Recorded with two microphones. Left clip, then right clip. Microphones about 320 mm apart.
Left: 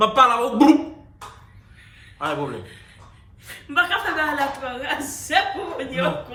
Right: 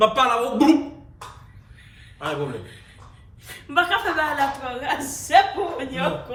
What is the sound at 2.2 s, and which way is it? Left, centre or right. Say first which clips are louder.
Speech: left 2 dB; centre.